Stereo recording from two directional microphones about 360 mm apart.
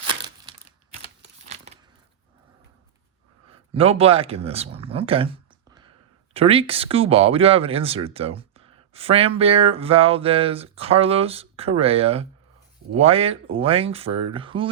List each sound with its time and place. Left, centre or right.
1.2 s a sound: centre
3.5 s speech: centre
6.3 s speech: centre